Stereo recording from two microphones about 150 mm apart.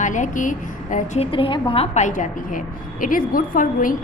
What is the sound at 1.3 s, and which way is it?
A woman's voice, 35° left (ahead or behind).